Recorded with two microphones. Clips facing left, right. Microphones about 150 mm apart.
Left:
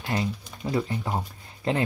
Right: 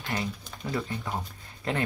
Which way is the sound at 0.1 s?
25° left (ahead or behind).